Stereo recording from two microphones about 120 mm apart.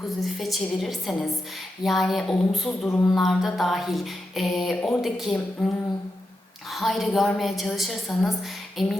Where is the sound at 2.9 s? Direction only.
20° left (ahead or behind).